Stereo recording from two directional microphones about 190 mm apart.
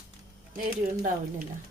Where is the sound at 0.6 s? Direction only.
50° right (ahead or behind).